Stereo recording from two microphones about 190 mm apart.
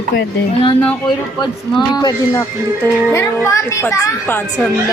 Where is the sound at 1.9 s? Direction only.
20° left (ahead or behind).